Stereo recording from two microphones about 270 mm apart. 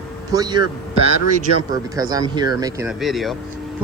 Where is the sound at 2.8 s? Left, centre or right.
Centre.